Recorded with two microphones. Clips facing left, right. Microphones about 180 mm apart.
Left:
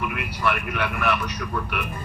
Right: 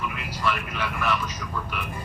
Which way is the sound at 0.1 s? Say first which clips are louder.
Left 3 dB; 60° left (ahead or behind).